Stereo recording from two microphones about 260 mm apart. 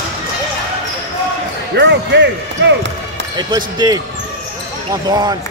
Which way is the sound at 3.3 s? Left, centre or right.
Centre.